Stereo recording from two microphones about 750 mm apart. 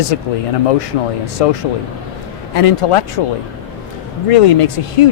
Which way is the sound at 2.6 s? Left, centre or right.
Left.